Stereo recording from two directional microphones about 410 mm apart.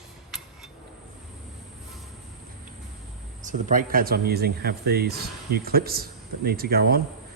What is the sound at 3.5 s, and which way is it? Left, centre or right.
Speech, centre.